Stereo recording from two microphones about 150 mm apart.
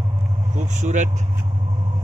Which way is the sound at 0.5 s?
55° right (ahead or behind).